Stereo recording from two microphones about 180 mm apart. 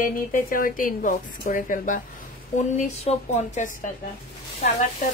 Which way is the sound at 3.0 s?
40° left (ahead or behind).